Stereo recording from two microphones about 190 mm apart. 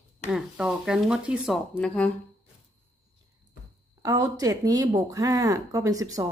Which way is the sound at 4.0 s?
20° right (ahead or behind).